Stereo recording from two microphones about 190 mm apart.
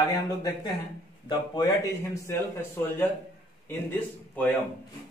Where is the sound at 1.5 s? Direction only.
20° left (ahead or behind).